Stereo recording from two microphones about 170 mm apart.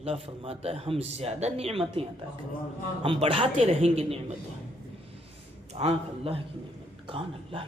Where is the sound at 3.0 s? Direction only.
30° right (ahead or behind).